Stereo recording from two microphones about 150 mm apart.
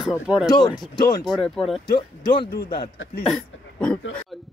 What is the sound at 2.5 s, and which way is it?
Speech, 90° left.